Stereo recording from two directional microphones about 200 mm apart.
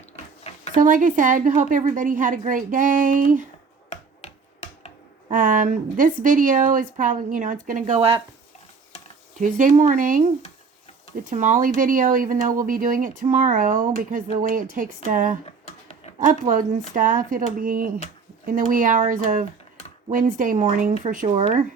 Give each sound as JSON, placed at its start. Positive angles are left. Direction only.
{"t": 0.4, "sound": "a sound", "side_deg": 30}
{"t": 0.8, "sound": "speech", "side_deg": -40}
{"t": 3.8, "sound": "finger snapping", "side_deg": 30}
{"t": 5.3, "sound": "speech", "side_deg": -40}
{"t": 9.4, "sound": "speech", "side_deg": -40}
{"t": 11.3, "sound": "speech", "side_deg": -40}